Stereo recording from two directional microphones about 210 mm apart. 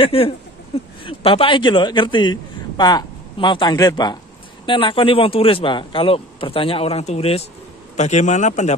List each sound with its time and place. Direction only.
0.0 s a man's voice: 25° left (ahead or behind)